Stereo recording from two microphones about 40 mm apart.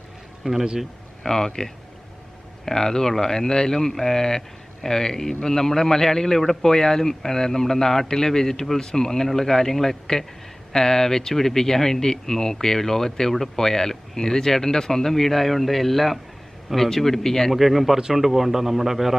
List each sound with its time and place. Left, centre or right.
0.4 s speech: right
1.2 s a man's voice: centre
17.5 s a man's voice: centre